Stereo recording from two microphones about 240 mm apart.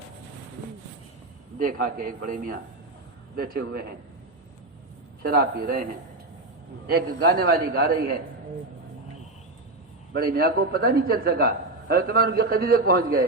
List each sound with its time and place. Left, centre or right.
1.5 s a man's voice: right
5.2 s a man's voice: right
6.8 s a man's voice: right
10.1 s a man's voice: right